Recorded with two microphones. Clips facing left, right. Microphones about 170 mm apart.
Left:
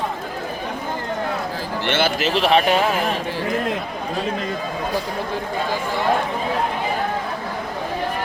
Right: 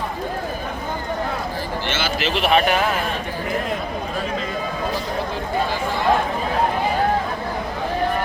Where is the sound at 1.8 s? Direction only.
55° left (ahead or behind); by 2.7 s 30° left (ahead or behind).